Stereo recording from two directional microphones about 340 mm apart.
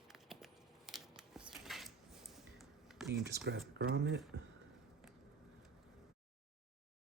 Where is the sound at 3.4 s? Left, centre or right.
Right.